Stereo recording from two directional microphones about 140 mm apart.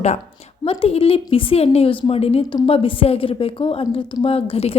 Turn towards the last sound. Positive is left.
turn(degrees=45)  # may be behind; listen again after turning